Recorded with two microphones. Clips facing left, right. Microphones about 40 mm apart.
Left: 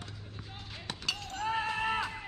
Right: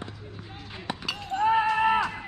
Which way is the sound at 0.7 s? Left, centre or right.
Centre.